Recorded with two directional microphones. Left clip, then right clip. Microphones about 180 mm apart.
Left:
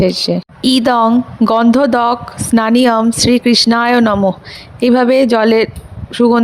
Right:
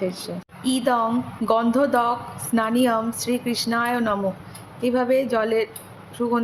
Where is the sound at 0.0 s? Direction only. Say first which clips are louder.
Left 14 dB; 50° left (ahead or behind).